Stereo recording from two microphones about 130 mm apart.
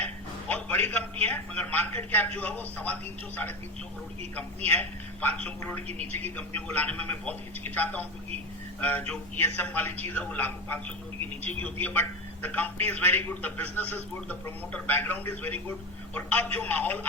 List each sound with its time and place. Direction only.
0.0 s a man's voice: 10° left (ahead or behind)
5.9 s a man's voice: 55° right (ahead or behind)
6.3 s a man's voice: 10° left (ahead or behind)